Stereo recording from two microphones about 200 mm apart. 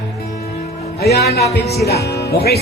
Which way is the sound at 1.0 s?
55° left (ahead or behind).